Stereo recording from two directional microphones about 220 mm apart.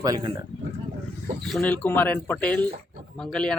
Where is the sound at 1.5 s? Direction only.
5° left (ahead or behind).